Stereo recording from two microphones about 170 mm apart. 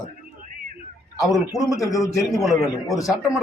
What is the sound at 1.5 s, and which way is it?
A man's voice, centre (ahead or behind).